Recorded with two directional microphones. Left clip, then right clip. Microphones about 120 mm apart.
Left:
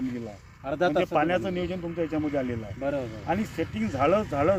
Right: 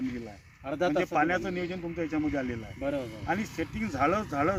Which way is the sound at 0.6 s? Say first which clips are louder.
Left 3 dB; 10° right (ahead or behind).